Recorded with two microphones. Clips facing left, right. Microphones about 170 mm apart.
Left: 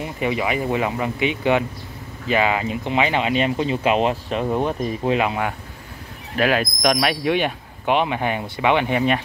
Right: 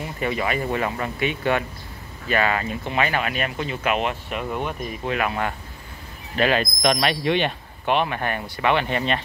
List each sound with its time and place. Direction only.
0.0 s speech: 15° left (ahead or behind)
6.3 s speech: 5° left (ahead or behind)